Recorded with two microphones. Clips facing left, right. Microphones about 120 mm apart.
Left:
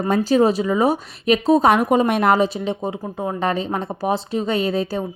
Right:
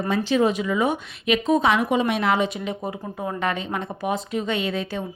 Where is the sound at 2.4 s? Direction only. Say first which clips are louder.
Left 5 dB; 30° left (ahead or behind).